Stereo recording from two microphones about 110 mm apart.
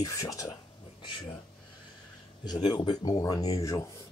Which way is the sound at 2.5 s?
40° left (ahead or behind).